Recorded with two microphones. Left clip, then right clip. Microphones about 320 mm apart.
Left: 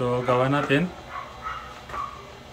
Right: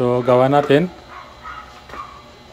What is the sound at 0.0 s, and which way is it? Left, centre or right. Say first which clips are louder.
Speech: right 8 dB; centre.